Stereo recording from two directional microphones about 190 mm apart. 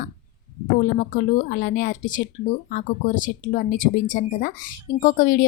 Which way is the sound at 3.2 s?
45° left (ahead or behind).